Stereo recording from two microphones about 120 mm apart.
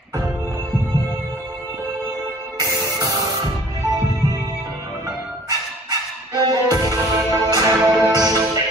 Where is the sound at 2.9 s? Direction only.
30° right (ahead or behind).